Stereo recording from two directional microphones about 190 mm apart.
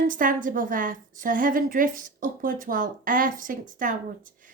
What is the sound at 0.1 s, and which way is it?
A woman's voice, 45° right (ahead or behind).